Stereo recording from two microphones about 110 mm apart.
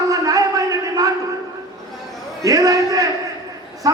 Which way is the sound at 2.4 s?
35° right (ahead or behind).